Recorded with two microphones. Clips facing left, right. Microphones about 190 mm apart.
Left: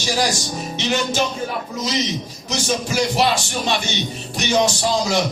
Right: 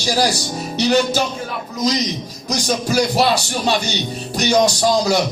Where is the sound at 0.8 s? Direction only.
35° right (ahead or behind).